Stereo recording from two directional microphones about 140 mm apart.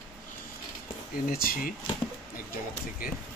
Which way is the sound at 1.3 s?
90° left.